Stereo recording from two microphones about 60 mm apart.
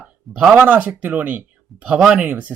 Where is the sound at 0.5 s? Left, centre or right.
Right.